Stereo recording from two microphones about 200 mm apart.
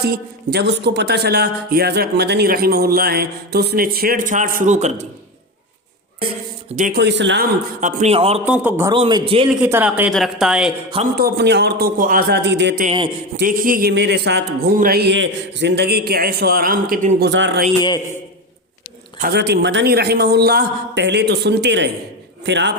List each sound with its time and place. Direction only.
0.0 s speech: 50° right (ahead or behind); by 5.0 s 35° right (ahead or behind)
6.7 s a man's voice: 40° right (ahead or behind)
7.0 s a man's voice: 60° right (ahead or behind)
7.8 s a man's voice: 40° right (ahead or behind)
8.4 s a man's voice: 10° right (ahead or behind)
8.9 s a man's voice: 20° right (ahead or behind)
9.6 s speech: 10° right (ahead or behind)
11.1 s a man's voice: 55° right (ahead or behind)
13.3 s speech: 45° right (ahead or behind); by 17.6 s 60° right (ahead or behind)
19.2 s a man's voice: 55° right (ahead or behind)